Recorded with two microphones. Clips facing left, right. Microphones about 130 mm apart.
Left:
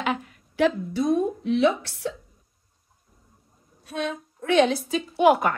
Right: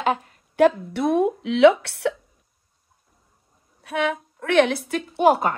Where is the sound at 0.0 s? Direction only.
40° right (ahead or behind); by 2.1 s 65° right (ahead or behind).